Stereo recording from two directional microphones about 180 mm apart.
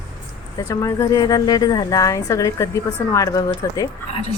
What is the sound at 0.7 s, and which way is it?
A woman's voice, 15° left (ahead or behind).